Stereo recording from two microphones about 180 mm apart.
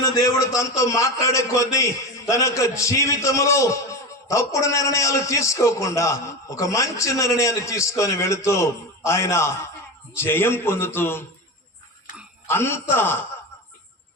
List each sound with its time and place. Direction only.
0.0 s a man's voice: 15° left (ahead or behind)
12.5 s a man's voice: 15° left (ahead or behind)